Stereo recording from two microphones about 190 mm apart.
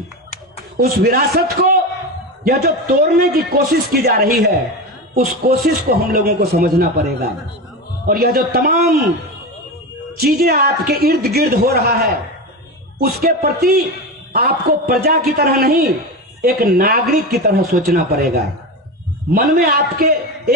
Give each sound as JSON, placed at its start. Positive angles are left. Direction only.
{"t": 0.7, "sound": "a man's voice", "side_deg": -55}
{"t": 10.2, "sound": "a man's voice", "side_deg": -55}
{"t": 19.5, "sound": "a man's voice", "side_deg": -50}